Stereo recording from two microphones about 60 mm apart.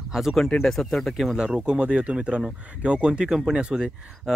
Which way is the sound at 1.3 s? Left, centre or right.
Centre.